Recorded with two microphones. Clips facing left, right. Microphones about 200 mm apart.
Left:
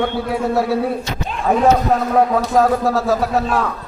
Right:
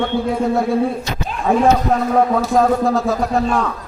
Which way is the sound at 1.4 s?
Centre (ahead or behind).